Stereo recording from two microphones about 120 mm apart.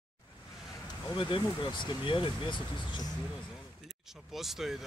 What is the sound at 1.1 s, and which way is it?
Speech, 45° left (ahead or behind).